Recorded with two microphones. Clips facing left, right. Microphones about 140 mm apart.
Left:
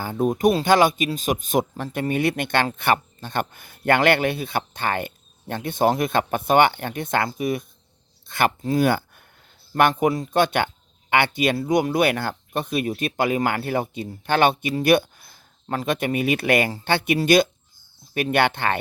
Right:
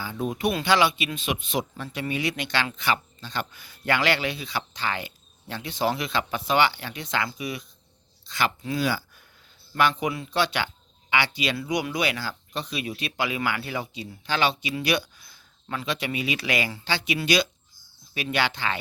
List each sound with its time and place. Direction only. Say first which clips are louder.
0.0 s speech: left 7 dB; 45° left (ahead or behind)